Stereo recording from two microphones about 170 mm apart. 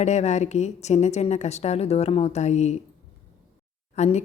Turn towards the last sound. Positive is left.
turn(degrees=40)  # may be behind; listen again after turning